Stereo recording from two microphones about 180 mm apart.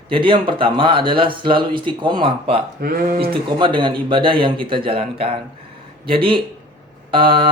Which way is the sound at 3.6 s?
25° right (ahead or behind).